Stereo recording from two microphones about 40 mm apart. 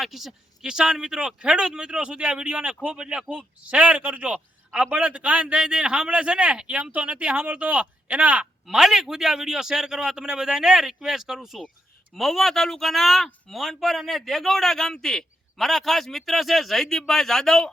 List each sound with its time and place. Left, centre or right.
0.0 s a man's voice: centre; by 3.2 s right
3.2 s a man's voice: right
8.6 s a man's voice: centre
12.1 s speech: centre